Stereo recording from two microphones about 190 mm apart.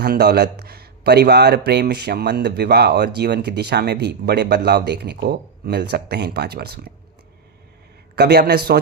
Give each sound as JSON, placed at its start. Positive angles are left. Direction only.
{"t": 0.0, "sound": "a man's voice", "side_deg": -60}
{"t": 8.1, "sound": "a man's voice", "side_deg": -60}